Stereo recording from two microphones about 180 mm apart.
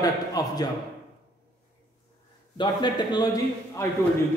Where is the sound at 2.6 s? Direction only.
25° left (ahead or behind).